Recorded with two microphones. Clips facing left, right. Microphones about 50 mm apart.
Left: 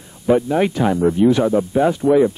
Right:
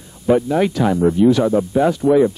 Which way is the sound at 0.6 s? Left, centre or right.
Centre.